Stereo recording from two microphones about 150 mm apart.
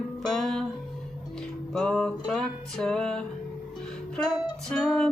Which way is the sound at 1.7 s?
5° left (ahead or behind).